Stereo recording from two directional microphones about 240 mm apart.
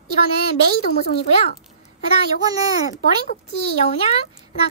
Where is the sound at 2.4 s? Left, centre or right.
Centre.